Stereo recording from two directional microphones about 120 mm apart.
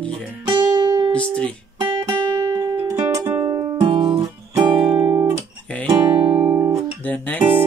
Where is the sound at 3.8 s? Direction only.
45° right (ahead or behind).